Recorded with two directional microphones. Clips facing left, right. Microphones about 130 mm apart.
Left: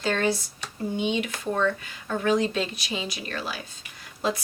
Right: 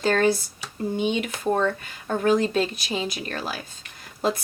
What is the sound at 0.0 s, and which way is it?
Speech, 45° right (ahead or behind).